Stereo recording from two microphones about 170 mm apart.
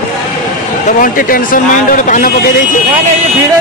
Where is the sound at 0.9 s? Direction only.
55° left (ahead or behind).